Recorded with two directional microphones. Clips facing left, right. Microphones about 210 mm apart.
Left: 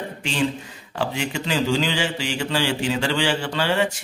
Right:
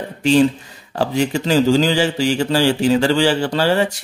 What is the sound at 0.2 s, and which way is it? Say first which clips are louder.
Speech: right 11 dB; 40° right (ahead or behind).